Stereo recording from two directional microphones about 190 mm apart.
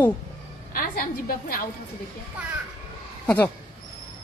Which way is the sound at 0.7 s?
50° left (ahead or behind).